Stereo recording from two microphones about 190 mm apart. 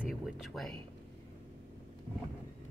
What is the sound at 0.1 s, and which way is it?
Speech, centre (ahead or behind).